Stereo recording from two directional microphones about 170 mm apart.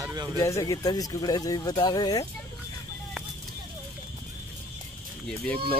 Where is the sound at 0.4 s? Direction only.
20° left (ahead or behind).